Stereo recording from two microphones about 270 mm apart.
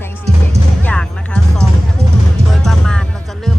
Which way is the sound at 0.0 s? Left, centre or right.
Centre.